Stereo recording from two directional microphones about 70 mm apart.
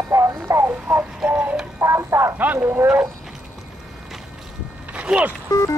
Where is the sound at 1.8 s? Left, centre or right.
Right.